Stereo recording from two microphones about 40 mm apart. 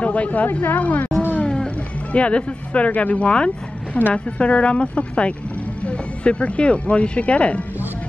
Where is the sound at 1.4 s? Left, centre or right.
Left.